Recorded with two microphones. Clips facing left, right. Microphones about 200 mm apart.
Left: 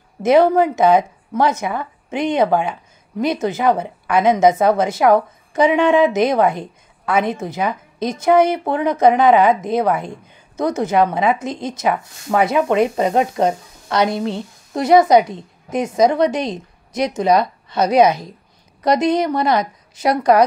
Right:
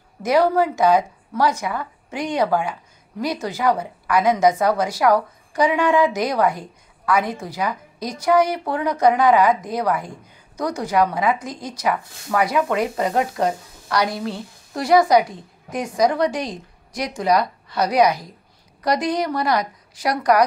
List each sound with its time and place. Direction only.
0.2 s a woman's voice: 25° left (ahead or behind)